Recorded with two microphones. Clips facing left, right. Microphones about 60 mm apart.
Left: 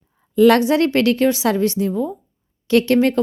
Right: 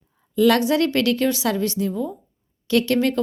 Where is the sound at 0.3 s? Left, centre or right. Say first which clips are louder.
Left 4 dB; left.